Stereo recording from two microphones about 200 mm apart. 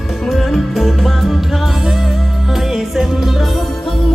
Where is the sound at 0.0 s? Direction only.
Centre (ahead or behind).